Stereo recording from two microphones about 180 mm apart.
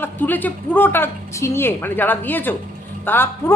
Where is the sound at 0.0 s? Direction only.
10° left (ahead or behind).